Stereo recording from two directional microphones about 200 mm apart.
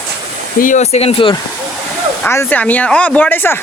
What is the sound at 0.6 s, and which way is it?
Speech, 35° left (ahead or behind).